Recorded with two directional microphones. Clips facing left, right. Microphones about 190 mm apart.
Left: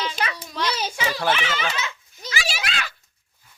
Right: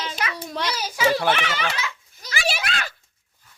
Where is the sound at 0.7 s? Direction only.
25° left (ahead or behind).